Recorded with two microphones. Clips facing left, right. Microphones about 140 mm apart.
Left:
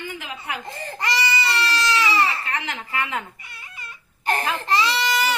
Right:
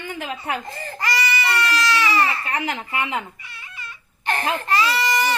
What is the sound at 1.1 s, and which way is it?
Baby cry, 25° left (ahead or behind).